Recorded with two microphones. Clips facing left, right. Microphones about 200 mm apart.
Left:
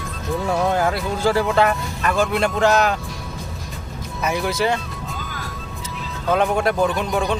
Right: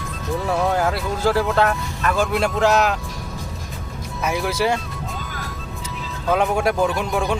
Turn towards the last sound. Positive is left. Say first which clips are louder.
# left 1 dB
turn(degrees=0)  # may be behind; listen again after turning